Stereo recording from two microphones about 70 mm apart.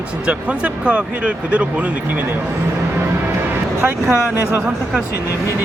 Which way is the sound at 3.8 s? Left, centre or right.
Right.